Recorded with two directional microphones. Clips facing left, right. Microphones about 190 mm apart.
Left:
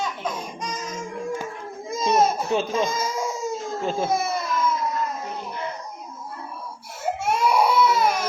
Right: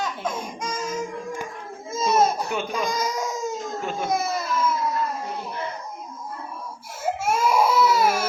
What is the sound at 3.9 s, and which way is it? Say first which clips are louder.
Speech: left 4 dB; 30° left (ahead or behind).